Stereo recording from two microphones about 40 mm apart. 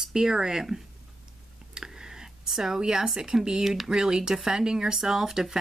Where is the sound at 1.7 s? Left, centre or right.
Centre.